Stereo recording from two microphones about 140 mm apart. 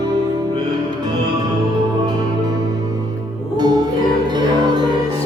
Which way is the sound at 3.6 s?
30° right (ahead or behind).